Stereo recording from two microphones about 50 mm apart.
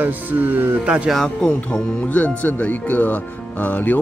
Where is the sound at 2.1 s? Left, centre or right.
Left.